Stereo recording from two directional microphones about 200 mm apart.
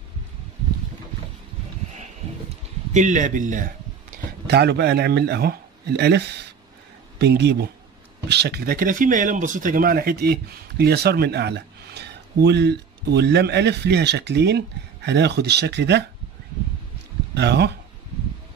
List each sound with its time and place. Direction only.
2.9 s a man's voice: 40° right (ahead or behind)
4.5 s speech: 55° right (ahead or behind)
17.3 s speech: 55° right (ahead or behind)